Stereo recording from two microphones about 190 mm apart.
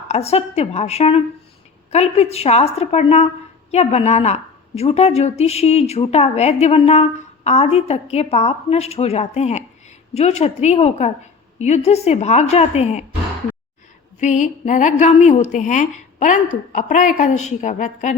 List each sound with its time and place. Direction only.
0.1 s a woman's voice: 35° left (ahead or behind)
14.2 s a woman's voice: 40° left (ahead or behind)